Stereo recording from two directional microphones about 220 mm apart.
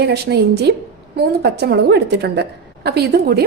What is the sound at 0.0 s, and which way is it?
A woman's voice, 50° right (ahead or behind).